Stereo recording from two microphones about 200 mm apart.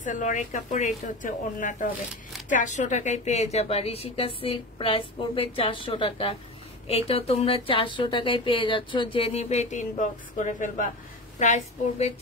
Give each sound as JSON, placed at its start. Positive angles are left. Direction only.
{"t": 0.0, "sound": "speech", "side_deg": 40}